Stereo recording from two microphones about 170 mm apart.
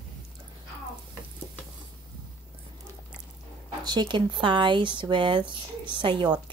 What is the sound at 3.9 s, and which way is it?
Speech, 25° right (ahead or behind).